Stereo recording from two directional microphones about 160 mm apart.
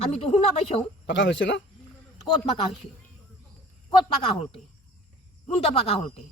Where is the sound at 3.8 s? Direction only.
35° left (ahead or behind).